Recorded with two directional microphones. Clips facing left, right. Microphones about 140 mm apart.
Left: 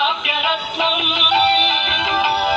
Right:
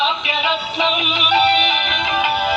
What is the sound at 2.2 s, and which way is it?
Music, 30° left (ahead or behind).